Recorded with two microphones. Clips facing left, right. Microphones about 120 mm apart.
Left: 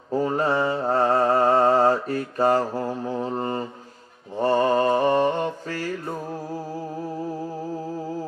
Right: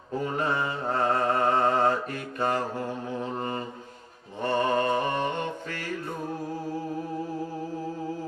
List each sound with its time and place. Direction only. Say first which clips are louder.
0.2 s mantra: left 6 dB; 35° left (ahead or behind)